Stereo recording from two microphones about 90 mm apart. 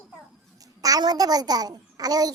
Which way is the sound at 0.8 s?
45° right (ahead or behind).